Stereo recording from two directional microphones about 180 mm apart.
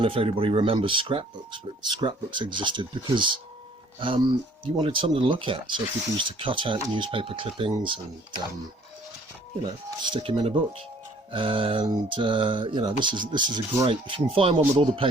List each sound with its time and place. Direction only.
0.0 s speech: 30° right (ahead or behind)
9.6 s speech: 25° right (ahead or behind)